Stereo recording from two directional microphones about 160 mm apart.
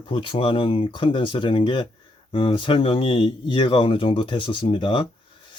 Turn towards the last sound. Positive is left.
turn(degrees=30)  # may be behind; listen again after turning